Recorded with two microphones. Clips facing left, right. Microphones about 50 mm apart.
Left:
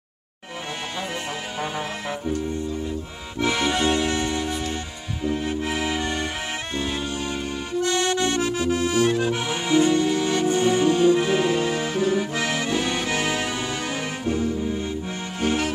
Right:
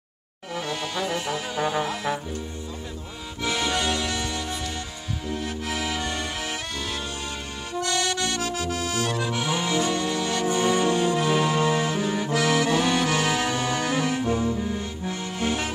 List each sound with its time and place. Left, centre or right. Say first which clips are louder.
3.3 s music: left 4 dB; left
7.8 s accordion: left 4 dB; left
10.6 s music: left 3 dB; centre
12.3 s accordion: right 3 dB; left
13.1 s music: right 1 dB; centre
15.4 s music: left 4 dB; centre